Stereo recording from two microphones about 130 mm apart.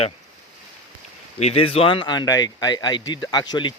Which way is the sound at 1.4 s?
50° left (ahead or behind).